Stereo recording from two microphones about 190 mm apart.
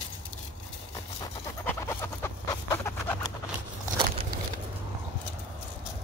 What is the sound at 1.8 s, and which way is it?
Fowl, 15° left (ahead or behind).